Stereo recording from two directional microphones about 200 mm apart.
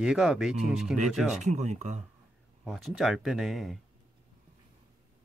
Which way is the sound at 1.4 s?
35° right (ahead or behind).